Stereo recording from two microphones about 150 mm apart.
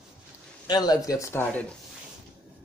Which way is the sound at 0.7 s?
25° left (ahead or behind).